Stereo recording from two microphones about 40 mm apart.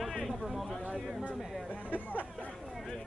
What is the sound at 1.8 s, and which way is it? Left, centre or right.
Speech, left.